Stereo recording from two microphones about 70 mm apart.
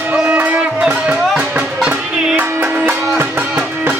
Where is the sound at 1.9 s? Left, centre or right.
Right.